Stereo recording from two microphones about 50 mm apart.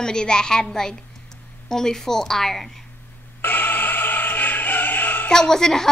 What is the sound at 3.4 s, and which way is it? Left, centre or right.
Music, left.